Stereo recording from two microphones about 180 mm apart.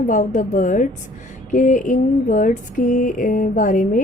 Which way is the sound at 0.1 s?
45° left (ahead or behind).